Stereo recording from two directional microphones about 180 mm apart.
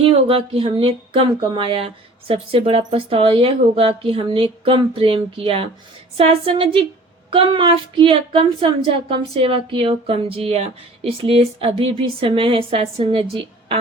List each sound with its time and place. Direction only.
0.0 s a woman's voice: 30° right (ahead or behind)